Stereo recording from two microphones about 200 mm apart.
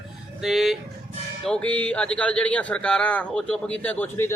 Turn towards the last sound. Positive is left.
turn(degrees=10)  # may be behind; listen again after turning